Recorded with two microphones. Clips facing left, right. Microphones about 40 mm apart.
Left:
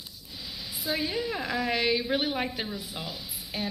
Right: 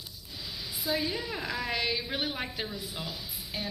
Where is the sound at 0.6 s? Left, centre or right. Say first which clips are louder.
Even; left.